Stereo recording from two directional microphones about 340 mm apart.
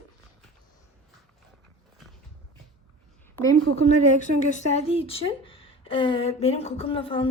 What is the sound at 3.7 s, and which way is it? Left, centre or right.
Speech, left.